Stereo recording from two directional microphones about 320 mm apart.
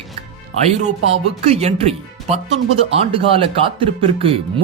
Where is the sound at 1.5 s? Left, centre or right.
Centre.